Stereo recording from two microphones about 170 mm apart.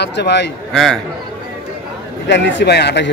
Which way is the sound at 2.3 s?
90° left.